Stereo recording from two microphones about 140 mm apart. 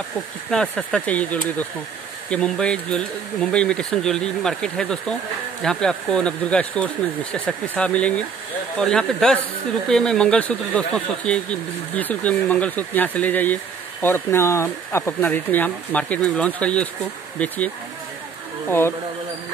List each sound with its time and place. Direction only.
0.5 s speech: 5° left (ahead or behind)
18.7 s speech: 15° left (ahead or behind)